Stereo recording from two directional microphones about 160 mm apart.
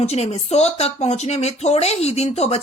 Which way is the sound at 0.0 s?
40° left (ahead or behind).